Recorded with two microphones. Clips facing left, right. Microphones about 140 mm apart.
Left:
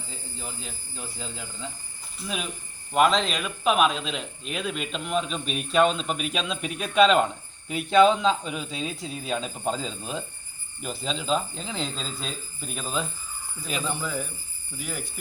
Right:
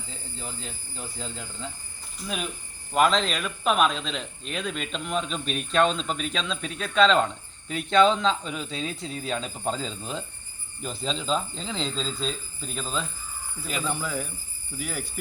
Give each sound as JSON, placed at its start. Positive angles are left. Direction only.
{"t": 0.3, "sound": "speech", "side_deg": 5}
{"t": 13.8, "sound": "speech", "side_deg": 0}